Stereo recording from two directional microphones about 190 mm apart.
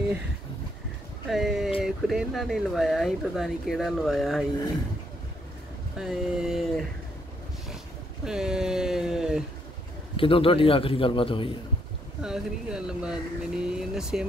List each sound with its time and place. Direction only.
1.3 s speech: centre (ahead or behind)
5.9 s speech: 5° right (ahead or behind)
8.3 s speech: 5° right (ahead or behind)
10.1 s a man's voice: 30° left (ahead or behind)
12.2 s speech: 5° right (ahead or behind)